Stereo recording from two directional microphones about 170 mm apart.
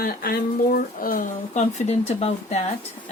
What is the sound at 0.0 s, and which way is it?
A woman's voice, 60° left (ahead or behind).